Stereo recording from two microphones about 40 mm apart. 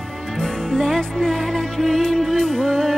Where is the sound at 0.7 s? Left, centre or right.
Centre.